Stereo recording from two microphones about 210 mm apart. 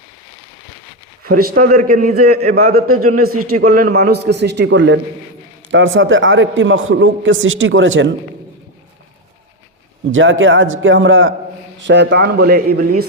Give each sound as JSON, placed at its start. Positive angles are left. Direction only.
{"t": 1.2, "sound": "a man's voice", "side_deg": -45}
{"t": 10.1, "sound": "a man's voice", "side_deg": -70}
{"t": 11.8, "sound": "a man's voice", "side_deg": -55}